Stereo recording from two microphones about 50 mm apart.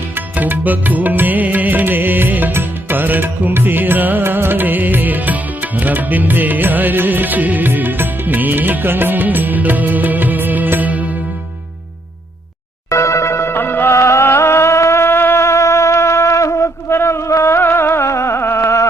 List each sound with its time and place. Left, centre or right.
0.3 s music: right
4.2 s music: right
12.9 s music: left
13.9 s music: left
14.3 s music: left
15.4 s a sound: left
18.4 s carnatic music: left